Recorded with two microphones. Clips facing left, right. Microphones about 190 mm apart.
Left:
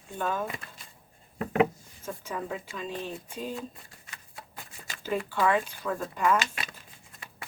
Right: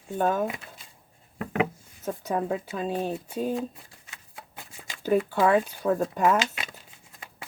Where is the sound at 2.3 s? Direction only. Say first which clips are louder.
Right 8 dB; 45° right (ahead or behind).